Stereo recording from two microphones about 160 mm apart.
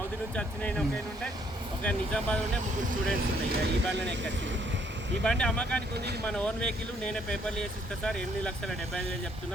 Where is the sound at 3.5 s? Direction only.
80° right.